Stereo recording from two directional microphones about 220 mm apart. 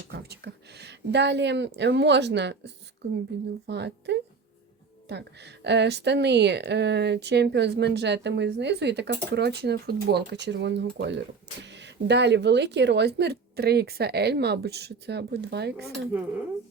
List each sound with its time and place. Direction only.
0.1 s a woman's voice: 45° right (ahead or behind)